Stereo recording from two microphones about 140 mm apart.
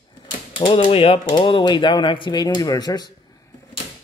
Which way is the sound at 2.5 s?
25° left (ahead or behind).